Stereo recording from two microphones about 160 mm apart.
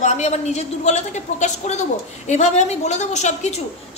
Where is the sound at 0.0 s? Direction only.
45° left (ahead or behind).